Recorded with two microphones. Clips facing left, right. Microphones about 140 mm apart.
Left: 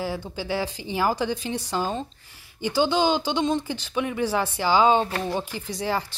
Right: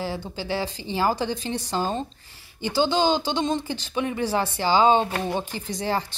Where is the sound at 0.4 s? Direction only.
10° left (ahead or behind).